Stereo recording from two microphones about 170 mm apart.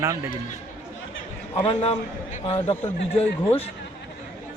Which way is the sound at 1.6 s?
35° left (ahead or behind).